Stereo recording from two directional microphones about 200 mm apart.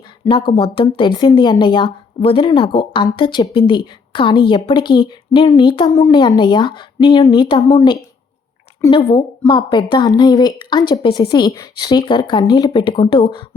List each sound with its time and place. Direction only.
0.3 s speech: 25° left (ahead or behind)
8.9 s speech: 25° left (ahead or behind)